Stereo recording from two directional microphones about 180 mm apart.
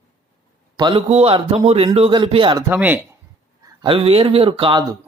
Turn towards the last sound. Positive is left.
turn(degrees=-30)  # may be behind; listen again after turning